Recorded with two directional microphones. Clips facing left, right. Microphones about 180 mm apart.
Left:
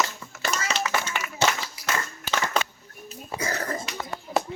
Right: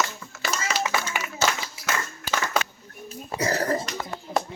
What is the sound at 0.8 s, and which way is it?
Clapping, 20° right (ahead or behind).